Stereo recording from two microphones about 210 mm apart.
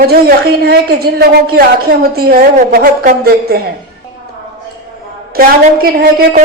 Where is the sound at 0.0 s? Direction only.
45° right (ahead or behind).